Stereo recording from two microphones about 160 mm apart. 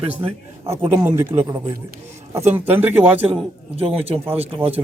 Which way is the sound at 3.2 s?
35° right (ahead or behind).